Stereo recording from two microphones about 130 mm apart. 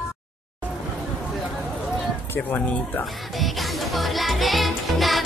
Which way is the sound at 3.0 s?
Centre (ahead or behind).